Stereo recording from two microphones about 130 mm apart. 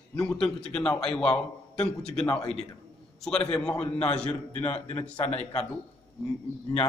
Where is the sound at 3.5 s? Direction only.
5° left (ahead or behind).